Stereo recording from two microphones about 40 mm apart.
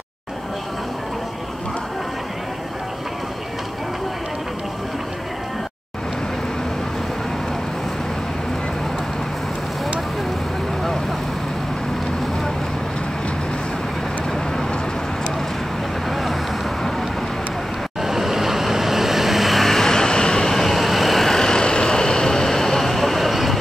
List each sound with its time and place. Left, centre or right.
16.1 s vehicle: centre
18.0 s vehicle: centre